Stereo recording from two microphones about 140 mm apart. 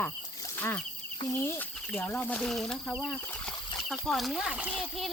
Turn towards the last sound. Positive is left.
turn(degrees=-5)  # may be behind; listen again after turning